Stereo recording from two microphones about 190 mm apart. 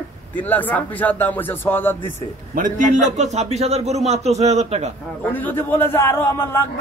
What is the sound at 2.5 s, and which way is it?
A man's voice, 45° right (ahead or behind).